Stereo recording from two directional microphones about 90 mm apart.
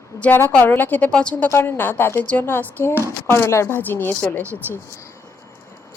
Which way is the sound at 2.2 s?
15° left (ahead or behind).